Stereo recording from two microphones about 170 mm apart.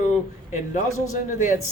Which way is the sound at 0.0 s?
45° left (ahead or behind).